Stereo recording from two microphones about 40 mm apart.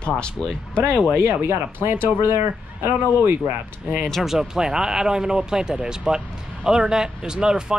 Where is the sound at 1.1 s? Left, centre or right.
Right.